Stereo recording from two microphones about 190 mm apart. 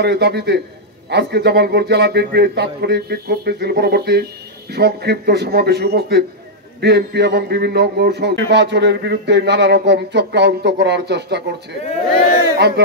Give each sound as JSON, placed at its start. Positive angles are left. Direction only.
{"t": 0.0, "sound": "a man's voice", "side_deg": -60}
{"t": 12.5, "sound": "a man's voice", "side_deg": -60}